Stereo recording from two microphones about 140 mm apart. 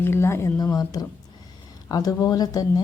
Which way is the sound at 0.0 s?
20° left (ahead or behind).